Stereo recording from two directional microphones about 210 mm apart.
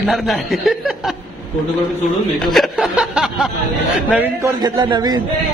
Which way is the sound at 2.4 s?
Centre (ahead or behind).